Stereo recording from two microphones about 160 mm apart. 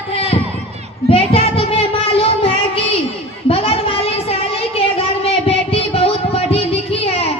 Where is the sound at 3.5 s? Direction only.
35° left (ahead or behind).